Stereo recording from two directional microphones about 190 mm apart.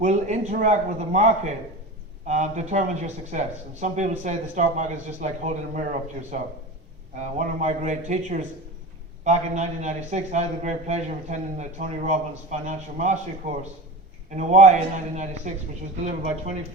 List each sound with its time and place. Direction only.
0.0 s speech: 40° right (ahead or behind)
7.2 s speech: 40° right (ahead or behind)